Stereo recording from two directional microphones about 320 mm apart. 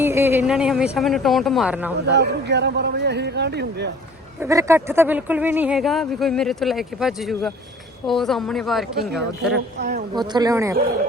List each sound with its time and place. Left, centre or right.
0.0 s speech: centre
2.0 s a man's voice: right
4.4 s speech: centre
10.2 s speech: centre